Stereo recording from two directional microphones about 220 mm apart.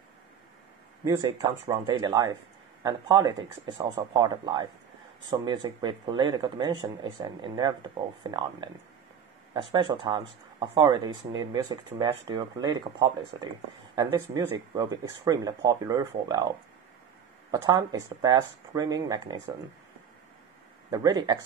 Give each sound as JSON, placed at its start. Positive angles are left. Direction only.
{"t": 1.0, "sound": "speech", "side_deg": -15}
{"t": 20.9, "sound": "speech", "side_deg": -15}